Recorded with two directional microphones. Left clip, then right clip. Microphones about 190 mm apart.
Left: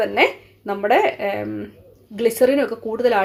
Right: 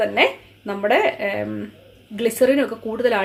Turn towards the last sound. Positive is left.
turn(degrees=20)  # may be behind; listen again after turning